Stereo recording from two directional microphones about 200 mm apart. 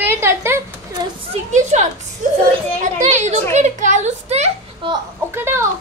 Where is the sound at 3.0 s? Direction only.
35° right (ahead or behind).